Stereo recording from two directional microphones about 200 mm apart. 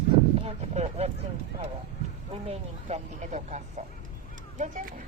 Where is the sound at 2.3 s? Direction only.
30° right (ahead or behind).